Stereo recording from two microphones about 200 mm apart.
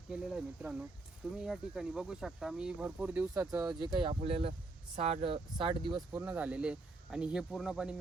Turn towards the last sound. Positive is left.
turn(degrees=-5)  # may be behind; listen again after turning